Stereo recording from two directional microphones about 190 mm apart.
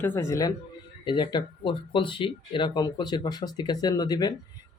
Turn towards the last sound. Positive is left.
turn(degrees=20)  # may be behind; listen again after turning